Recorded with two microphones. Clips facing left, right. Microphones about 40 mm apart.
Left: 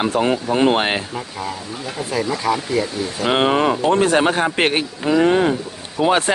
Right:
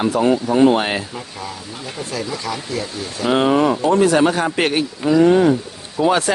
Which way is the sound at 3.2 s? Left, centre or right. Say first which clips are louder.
Right 1 dB; left.